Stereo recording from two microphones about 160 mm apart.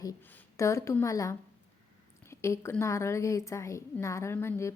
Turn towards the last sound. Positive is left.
turn(degrees=15)  # may be behind; listen again after turning